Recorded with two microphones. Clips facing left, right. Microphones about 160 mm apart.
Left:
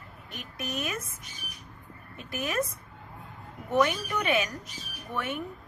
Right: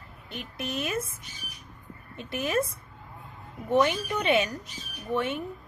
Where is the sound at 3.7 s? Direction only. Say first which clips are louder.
Right 2 dB; 30° right (ahead or behind).